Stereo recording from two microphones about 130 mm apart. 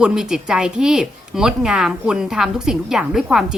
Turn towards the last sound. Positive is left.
turn(degrees=0)  # may be behind; listen again after turning